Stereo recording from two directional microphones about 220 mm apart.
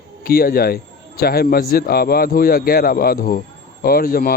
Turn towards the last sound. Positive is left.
turn(degrees=40)  # may be behind; listen again after turning